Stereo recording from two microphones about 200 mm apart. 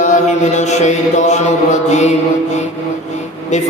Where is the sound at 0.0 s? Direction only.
40° left (ahead or behind).